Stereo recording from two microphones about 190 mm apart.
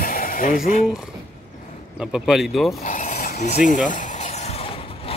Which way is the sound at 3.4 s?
40° left (ahead or behind).